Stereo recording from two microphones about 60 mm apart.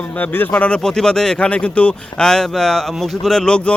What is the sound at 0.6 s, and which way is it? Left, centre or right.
Speech, centre.